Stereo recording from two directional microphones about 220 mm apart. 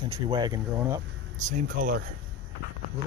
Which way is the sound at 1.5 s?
35° right (ahead or behind).